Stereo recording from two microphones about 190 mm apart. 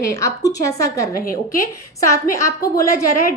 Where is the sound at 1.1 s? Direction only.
50° left (ahead or behind).